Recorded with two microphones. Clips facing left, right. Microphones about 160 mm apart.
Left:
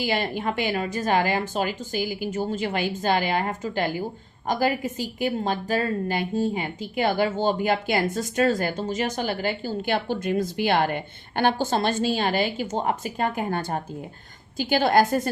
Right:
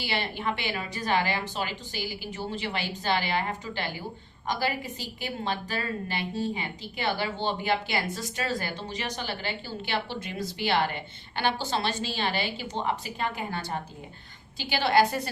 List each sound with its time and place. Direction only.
0.0 s a woman's voice: 45° left (ahead or behind)